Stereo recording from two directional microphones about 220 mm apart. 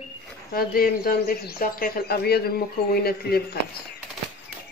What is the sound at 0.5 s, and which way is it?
Speech, 40° left (ahead or behind).